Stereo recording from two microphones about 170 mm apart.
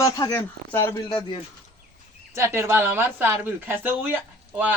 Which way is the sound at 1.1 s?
30° left (ahead or behind).